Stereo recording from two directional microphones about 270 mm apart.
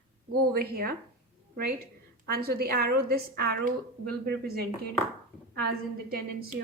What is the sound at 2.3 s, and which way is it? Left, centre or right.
A woman's voice, right.